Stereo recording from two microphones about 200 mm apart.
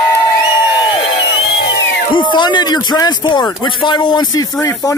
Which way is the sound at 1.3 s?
70° left (ahead or behind).